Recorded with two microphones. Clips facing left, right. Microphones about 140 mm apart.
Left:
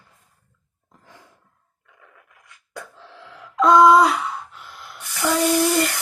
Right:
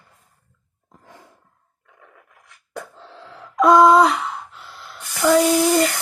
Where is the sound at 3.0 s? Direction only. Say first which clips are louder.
Right 2 dB; 35° right (ahead or behind).